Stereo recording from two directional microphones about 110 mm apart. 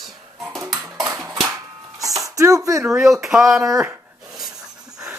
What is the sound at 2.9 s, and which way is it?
Speech, 5° right (ahead or behind).